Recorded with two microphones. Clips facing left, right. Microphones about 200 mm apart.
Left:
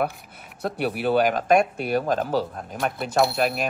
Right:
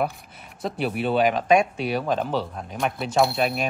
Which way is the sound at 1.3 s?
50° left (ahead or behind).